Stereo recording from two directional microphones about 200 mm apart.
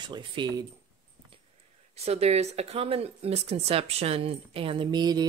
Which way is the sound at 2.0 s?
30° right (ahead or behind).